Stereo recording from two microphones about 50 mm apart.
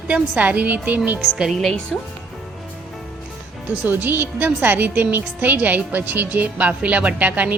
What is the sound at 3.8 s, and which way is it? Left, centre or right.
A woman's voice, right.